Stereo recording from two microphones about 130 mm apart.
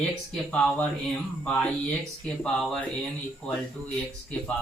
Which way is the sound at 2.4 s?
5° left (ahead or behind).